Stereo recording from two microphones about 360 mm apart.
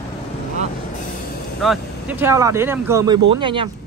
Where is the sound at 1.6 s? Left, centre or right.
Centre.